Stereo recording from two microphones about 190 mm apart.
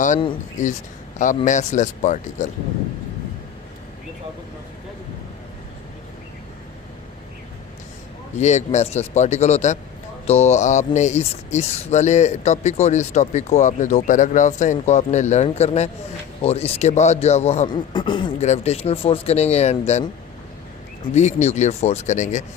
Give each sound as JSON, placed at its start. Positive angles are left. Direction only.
{"t": 0.6, "sound": "speech", "side_deg": 40}
{"t": 8.4, "sound": "speech", "side_deg": 35}
{"t": 17.7, "sound": "speech", "side_deg": 25}
{"t": 18.3, "sound": "speech", "side_deg": 35}
{"t": 21.1, "sound": "speech", "side_deg": 35}